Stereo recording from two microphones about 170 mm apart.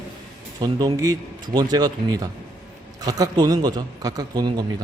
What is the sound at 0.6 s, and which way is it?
A man's voice, 20° right (ahead or behind).